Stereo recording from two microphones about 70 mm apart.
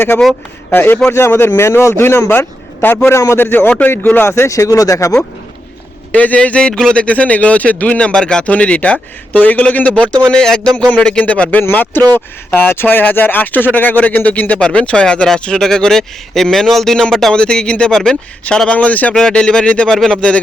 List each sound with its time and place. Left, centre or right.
0.7 s a man's voice: left
3.3 s a man's voice: left
4.4 s speech: left
6.1 s a man's voice: centre
19.1 s speech: centre
19.9 s speech: centre